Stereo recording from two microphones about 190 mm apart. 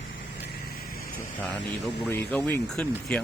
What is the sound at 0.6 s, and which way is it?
Vehicle, 50° left (ahead or behind).